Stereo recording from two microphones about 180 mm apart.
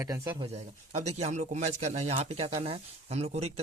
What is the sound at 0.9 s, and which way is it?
Speech, 35° right (ahead or behind).